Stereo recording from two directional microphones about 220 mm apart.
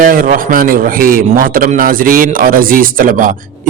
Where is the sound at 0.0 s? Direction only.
40° right (ahead or behind).